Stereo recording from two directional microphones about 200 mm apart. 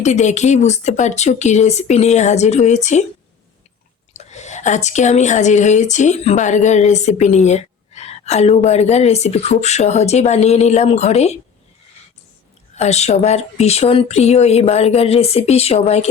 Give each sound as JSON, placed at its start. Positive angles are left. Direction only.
{"t": 0.0, "sound": "speech", "side_deg": 35}
{"t": 4.1, "sound": "speech", "side_deg": 35}
{"t": 12.7, "sound": "speech", "side_deg": 35}